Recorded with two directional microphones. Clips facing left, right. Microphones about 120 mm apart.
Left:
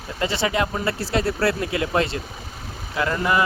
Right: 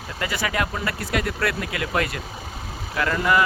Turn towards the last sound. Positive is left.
turn(degrees=25)  # may be behind; listen again after turning